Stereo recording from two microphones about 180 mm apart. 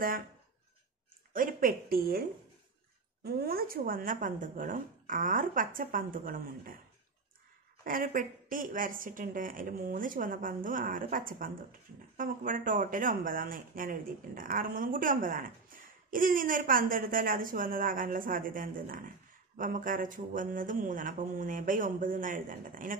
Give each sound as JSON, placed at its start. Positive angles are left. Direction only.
{"t": 1.3, "sound": "speech", "side_deg": -50}
{"t": 3.3, "sound": "speech", "side_deg": -55}
{"t": 7.8, "sound": "speech", "side_deg": -50}